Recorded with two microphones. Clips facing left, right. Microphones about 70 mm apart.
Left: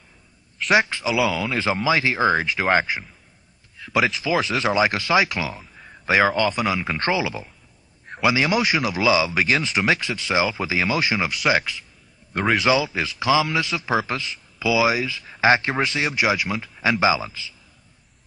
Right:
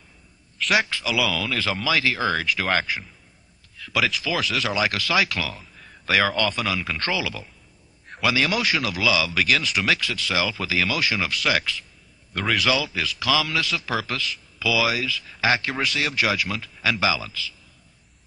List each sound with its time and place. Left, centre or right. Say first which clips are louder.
0.7 s a man's voice: left 4 dB; left